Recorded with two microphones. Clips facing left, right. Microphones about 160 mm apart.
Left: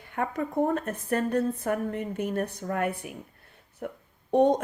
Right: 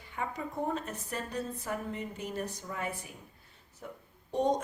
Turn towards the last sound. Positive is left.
turn(degrees=60)  # may be behind; listen again after turning